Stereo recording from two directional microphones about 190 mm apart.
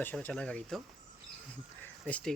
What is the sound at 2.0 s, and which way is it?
Speech, 5° left (ahead or behind).